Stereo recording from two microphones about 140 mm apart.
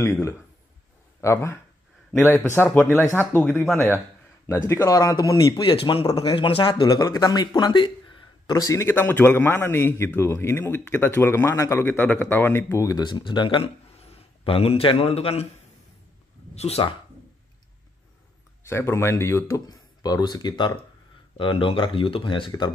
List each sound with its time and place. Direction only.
0.0 s speech: 20° left (ahead or behind); by 13.7 s 35° left (ahead or behind)
13.9 s a man's voice: 45° left (ahead or behind)
16.5 s speech: 45° left (ahead or behind)
18.6 s speech: 20° left (ahead or behind)